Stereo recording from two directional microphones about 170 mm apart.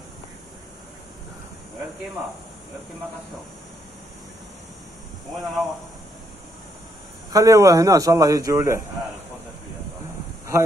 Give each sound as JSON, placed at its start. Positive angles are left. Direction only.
{"t": 5.4, "sound": "a man's voice", "side_deg": 0}
{"t": 7.2, "sound": "a man's voice", "side_deg": -20}